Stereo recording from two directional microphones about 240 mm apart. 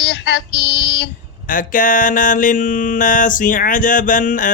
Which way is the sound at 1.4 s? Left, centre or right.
Left.